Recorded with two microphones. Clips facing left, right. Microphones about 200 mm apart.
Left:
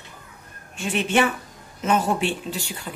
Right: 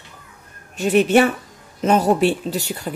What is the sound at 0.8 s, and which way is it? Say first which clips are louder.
Speech: right 7 dB; 40° right (ahead or behind).